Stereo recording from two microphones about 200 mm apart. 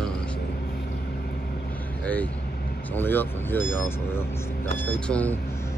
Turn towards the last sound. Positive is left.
turn(degrees=5)  # may be behind; listen again after turning